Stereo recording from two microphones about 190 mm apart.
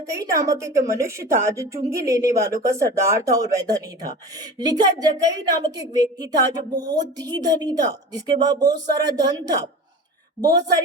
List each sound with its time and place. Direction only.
0.0 s a woman's voice: 15° right (ahead or behind)